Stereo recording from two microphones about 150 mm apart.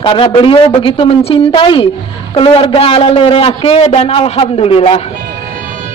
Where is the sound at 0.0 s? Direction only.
35° left (ahead or behind).